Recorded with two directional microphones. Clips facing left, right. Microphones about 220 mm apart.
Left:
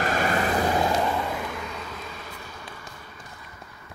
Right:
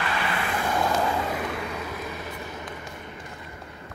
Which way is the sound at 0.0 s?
45° left (ahead or behind).